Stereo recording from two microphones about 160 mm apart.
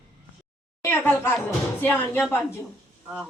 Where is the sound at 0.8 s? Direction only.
15° left (ahead or behind).